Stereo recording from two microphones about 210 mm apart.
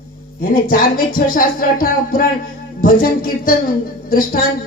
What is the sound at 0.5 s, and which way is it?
A woman's voice, 40° left (ahead or behind).